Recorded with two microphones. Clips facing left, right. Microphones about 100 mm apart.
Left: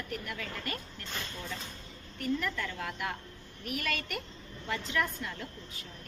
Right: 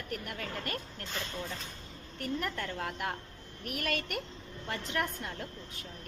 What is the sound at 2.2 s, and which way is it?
A woman's voice, 45° right (ahead or behind).